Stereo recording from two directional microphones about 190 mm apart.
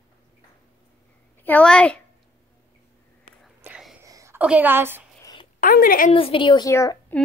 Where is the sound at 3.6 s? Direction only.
5° right (ahead or behind).